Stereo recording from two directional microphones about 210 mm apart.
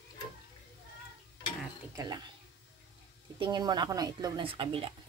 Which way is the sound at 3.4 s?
20° right (ahead or behind).